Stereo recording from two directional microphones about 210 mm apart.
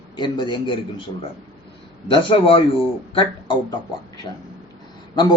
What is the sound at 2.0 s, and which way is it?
A man's voice, 25° left (ahead or behind).